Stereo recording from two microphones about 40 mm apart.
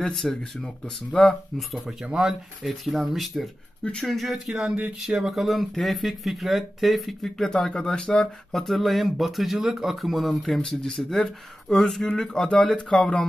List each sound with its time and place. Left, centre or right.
0.1 s speech: centre
2.6 s speech: centre
4.6 s speech: right
5.1 s speech: centre
7.5 s speech: centre
12.9 s speech: left